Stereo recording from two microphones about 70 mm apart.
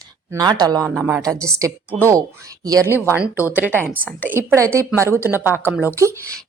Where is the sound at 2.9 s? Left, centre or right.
Right.